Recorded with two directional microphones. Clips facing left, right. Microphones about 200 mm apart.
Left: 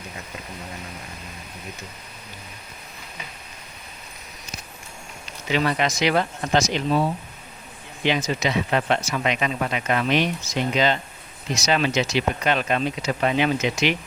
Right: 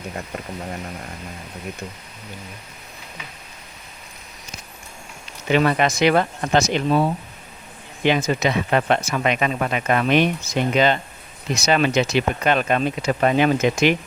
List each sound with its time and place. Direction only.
5.5 s speech: 55° right (ahead or behind)